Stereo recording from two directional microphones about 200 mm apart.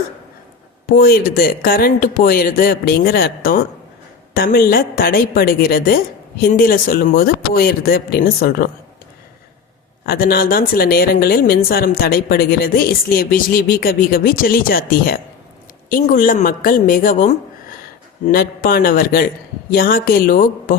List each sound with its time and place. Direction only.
0.9 s a woman's voice: 50° left (ahead or behind)
10.1 s a woman's voice: 50° left (ahead or behind)